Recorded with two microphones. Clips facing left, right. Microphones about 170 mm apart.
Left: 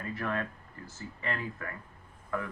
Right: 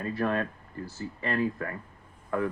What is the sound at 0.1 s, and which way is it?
Speech, 35° right (ahead or behind).